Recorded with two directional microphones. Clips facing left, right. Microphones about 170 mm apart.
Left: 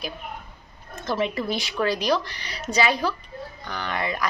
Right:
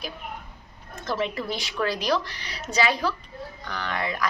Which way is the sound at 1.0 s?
Centre (ahead or behind).